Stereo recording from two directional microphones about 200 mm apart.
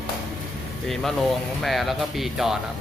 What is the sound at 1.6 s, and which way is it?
Speech, centre (ahead or behind).